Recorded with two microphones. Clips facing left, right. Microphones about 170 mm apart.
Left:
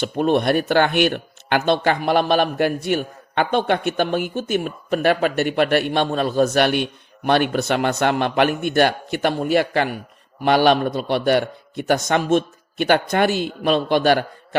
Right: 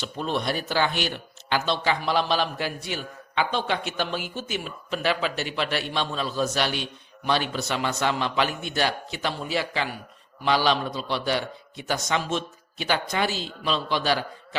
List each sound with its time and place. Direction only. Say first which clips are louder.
0.0 s speech: left 10 dB; 55° left (ahead or behind)